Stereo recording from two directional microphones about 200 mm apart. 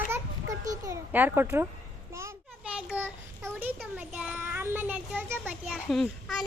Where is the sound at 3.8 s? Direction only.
5° right (ahead or behind).